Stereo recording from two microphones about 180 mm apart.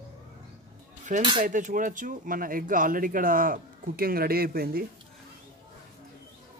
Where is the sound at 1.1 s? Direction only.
45° right (ahead or behind).